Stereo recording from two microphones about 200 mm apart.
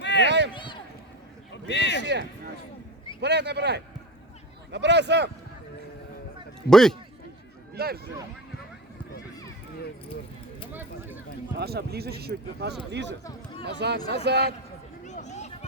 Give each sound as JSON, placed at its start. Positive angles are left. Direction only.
{"t": 0.0, "sound": "run", "side_deg": 60}
{"t": 0.3, "sound": "run", "side_deg": -60}
{"t": 0.5, "sound": "run", "side_deg": 25}
{"t": 1.6, "sound": "a sound", "side_deg": 60}
{"t": 3.2, "sound": "speech", "side_deg": -55}
{"t": 6.7, "sound": "a man's voice", "side_deg": 0}
{"t": 7.8, "sound": "speech", "side_deg": -50}
{"t": 10.7, "sound": "a sound", "side_deg": -10}
{"t": 11.5, "sound": "speech", "side_deg": -55}
{"t": 15.0, "sound": "a sound", "side_deg": 35}